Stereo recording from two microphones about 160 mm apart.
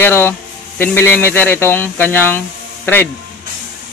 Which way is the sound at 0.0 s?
15° left (ahead or behind).